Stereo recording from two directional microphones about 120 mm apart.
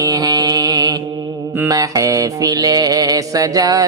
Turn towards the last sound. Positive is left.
turn(degrees=-30)  # may be behind; listen again after turning